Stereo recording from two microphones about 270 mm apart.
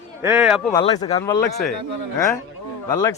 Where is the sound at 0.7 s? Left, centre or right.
Centre.